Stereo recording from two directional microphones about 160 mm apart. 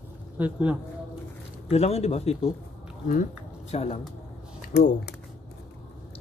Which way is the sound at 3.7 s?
40° left (ahead or behind).